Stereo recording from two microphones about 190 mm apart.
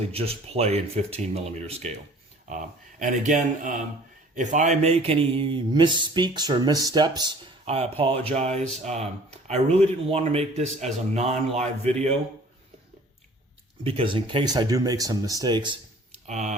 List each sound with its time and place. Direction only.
0.0 s speech: 30° right (ahead or behind)
3.0 s a man's voice: 40° right (ahead or behind)
13.8 s speech: 30° right (ahead or behind)
16.2 s speech: 40° right (ahead or behind)